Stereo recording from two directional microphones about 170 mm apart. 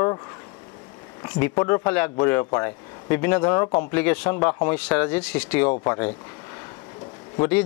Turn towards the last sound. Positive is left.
turn(degrees=10)  # may be behind; listen again after turning